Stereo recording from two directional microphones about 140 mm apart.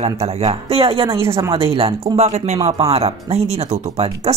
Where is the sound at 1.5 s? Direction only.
40° right (ahead or behind).